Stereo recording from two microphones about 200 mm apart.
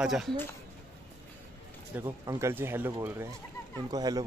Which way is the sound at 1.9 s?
10° right (ahead or behind).